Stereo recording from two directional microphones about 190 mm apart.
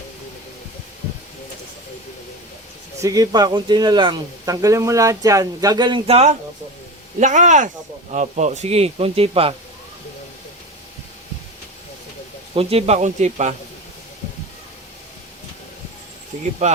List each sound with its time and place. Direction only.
3.0 s speech: 20° right (ahead or behind)
12.5 s speech: 30° right (ahead or behind)
16.6 s speech: 35° right (ahead or behind)